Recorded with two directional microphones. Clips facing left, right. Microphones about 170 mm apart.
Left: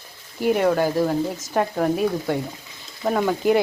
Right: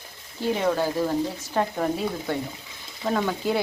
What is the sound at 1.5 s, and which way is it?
Speech, 5° left (ahead or behind).